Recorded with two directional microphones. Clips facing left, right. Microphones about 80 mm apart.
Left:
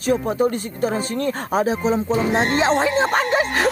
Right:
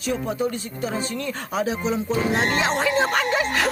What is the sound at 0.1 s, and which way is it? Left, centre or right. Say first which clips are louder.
Speech: left 6 dB; left.